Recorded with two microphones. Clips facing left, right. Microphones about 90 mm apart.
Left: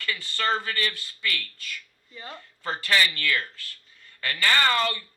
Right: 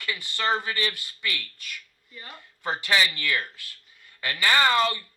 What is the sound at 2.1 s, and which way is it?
Speech, 25° left (ahead or behind).